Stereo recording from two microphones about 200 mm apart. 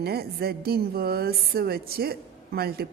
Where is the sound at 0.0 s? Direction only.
50° right (ahead or behind).